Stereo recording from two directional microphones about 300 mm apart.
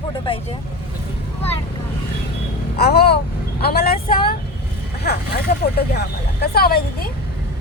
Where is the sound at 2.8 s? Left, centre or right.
Left.